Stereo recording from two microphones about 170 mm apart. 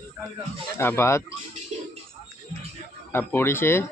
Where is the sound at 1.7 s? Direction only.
40° right (ahead or behind).